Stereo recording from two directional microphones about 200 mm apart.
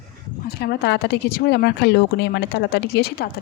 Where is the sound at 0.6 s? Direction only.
55° left (ahead or behind).